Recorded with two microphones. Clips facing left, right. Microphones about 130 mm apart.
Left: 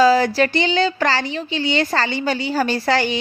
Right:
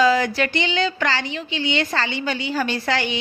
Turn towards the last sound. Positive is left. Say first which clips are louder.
# left 4 dB
turn(degrees=35)  # may be behind; listen again after turning